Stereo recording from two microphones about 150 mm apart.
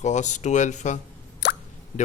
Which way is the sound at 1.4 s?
70° left (ahead or behind).